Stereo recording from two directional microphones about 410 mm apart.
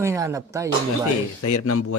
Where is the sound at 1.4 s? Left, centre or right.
Left.